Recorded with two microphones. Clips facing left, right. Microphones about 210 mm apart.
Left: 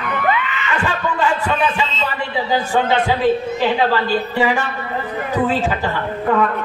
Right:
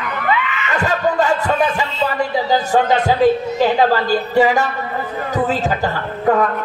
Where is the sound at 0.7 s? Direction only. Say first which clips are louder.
Right 5 dB; 40° right (ahead or behind).